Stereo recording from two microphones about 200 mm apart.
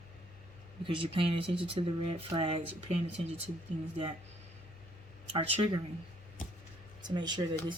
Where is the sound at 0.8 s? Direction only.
25° right (ahead or behind).